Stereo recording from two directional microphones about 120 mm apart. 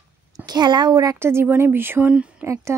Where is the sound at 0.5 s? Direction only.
40° right (ahead or behind).